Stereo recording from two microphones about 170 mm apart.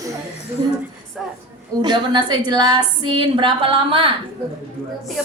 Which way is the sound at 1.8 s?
25° right (ahead or behind).